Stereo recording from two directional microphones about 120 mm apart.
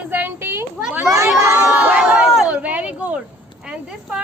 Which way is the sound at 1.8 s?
10° right (ahead or behind).